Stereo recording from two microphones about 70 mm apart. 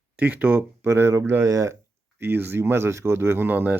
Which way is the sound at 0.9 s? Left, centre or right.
Right.